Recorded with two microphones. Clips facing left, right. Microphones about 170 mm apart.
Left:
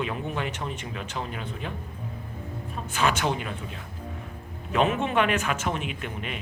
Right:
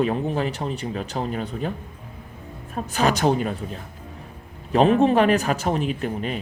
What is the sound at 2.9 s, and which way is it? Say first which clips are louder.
A man's voice: right 6 dB; 40° right (ahead or behind).